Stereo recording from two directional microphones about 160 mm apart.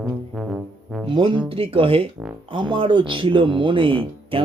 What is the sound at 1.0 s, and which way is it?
Speech, 30° right (ahead or behind).